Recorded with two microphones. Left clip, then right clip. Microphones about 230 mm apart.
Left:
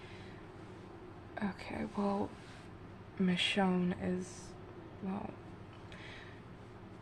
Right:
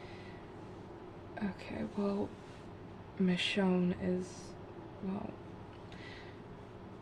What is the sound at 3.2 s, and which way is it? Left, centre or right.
Speech, left.